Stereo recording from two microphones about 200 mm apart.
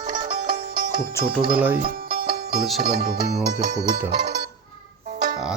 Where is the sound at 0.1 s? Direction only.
40° right (ahead or behind).